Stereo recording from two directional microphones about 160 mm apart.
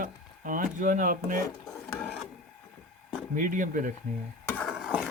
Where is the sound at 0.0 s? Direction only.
55° right (ahead or behind).